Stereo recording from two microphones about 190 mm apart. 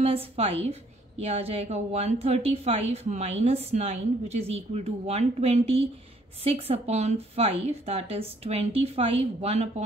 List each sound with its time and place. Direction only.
0.0 s a woman's voice: 30° right (ahead or behind)